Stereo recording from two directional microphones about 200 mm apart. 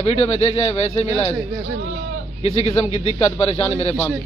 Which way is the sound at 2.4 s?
30° left (ahead or behind).